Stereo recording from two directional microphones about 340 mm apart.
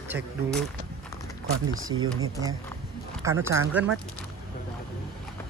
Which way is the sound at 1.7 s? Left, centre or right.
Right.